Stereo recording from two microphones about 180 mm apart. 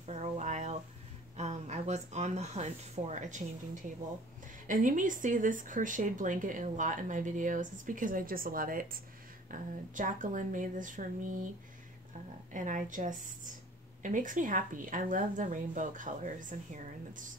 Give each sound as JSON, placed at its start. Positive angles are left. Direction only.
{"t": 0.0, "sound": "a sound", "side_deg": -40}
{"t": 1.3, "sound": "speech", "side_deg": -40}
{"t": 4.6, "sound": "speech", "side_deg": -45}
{"t": 12.5, "sound": "speech", "side_deg": -45}